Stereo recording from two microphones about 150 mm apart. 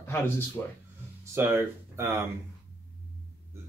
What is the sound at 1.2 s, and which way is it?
Speech, 15° right (ahead or behind).